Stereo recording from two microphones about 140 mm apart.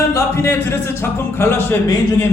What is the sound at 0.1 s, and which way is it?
Music, 20° left (ahead or behind).